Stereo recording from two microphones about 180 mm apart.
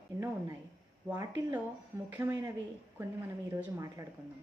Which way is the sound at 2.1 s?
10° right (ahead or behind).